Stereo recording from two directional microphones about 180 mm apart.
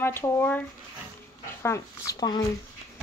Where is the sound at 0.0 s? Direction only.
15° left (ahead or behind).